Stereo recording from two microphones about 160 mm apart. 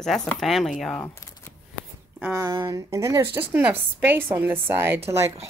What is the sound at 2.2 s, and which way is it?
A woman's voice, 15° right (ahead or behind).